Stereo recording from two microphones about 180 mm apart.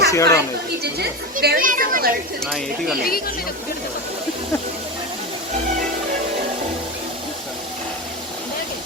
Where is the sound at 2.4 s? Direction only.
Centre (ahead or behind).